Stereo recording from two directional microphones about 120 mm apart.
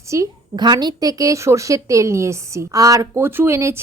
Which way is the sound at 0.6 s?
35° right (ahead or behind).